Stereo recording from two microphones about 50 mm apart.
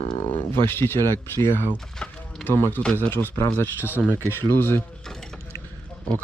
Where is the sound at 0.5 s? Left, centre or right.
Left.